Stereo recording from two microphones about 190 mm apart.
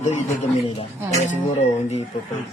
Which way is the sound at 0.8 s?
35° left (ahead or behind).